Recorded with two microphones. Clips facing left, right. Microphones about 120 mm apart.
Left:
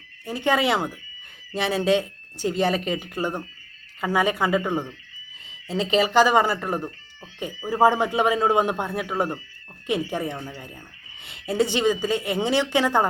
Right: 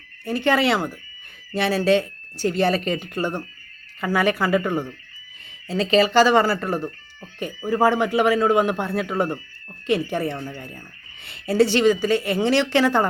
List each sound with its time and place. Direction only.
0.4 s a woman's voice: 15° left (ahead or behind)